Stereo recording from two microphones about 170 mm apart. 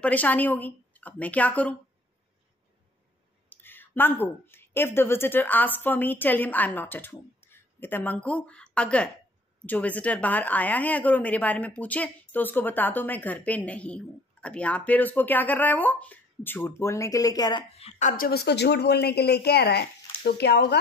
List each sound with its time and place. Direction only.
0.0 s speech: 10° left (ahead or behind)
3.4 s a woman's voice: 10° left (ahead or behind)
17.7 s a woman's voice: 40° left (ahead or behind); by 20.6 s 75° left (ahead or behind)